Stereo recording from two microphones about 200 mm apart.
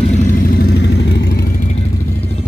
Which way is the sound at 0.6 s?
55° left (ahead or behind).